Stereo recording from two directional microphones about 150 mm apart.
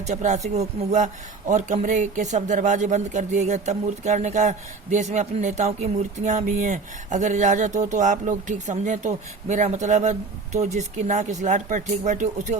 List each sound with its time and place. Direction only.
0.0 s speech: 50° right (ahead or behind)